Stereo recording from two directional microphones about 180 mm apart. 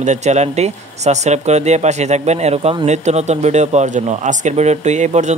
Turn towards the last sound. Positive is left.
turn(degrees=-40)  # may be behind; listen again after turning